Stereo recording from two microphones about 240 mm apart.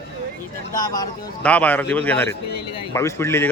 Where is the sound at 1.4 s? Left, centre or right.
Centre.